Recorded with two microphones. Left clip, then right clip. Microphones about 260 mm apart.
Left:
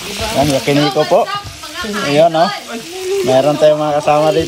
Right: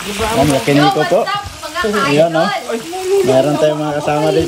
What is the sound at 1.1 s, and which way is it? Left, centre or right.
Speech, left.